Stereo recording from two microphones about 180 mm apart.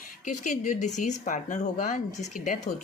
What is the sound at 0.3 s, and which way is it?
A woman's voice, 40° left (ahead or behind).